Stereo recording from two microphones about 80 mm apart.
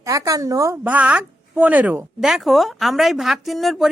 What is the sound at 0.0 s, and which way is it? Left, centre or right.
Speech, right.